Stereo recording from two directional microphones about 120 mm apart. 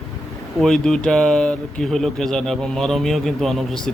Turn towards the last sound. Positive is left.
turn(degrees=5)  # may be behind; listen again after turning